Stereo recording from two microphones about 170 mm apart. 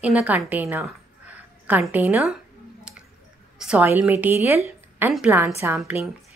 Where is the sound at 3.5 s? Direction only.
5° right (ahead or behind).